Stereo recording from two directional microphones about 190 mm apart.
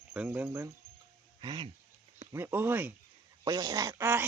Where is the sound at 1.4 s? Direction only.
25° right (ahead or behind).